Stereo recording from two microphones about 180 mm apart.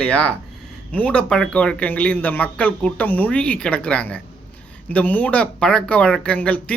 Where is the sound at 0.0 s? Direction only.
5° left (ahead or behind).